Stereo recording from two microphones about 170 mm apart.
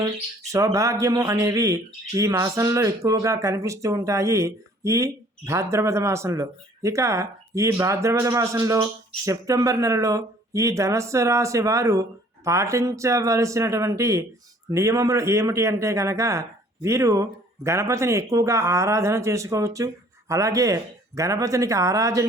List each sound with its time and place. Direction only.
0.5 s speech: 20° right (ahead or behind)